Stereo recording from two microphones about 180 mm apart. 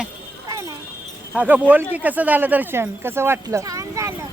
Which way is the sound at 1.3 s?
10° right (ahead or behind).